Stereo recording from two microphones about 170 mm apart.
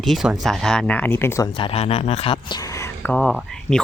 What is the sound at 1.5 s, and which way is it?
Speech, 35° left (ahead or behind).